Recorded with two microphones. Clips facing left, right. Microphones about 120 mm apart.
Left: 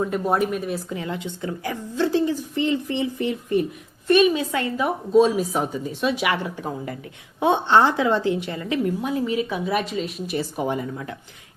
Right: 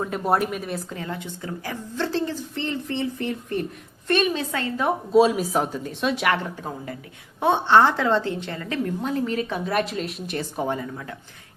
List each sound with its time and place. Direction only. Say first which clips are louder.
0.1 s speech: left 1 dB; centre (ahead or behind)
0.9 s a woman's voice: left 3 dB; 20° left (ahead or behind)
4.8 s a woman's voice: even; centre (ahead or behind)